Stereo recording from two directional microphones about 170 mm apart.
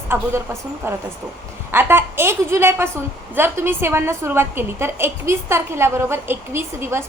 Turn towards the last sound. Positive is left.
turn(degrees=-15)  # may be behind; listen again after turning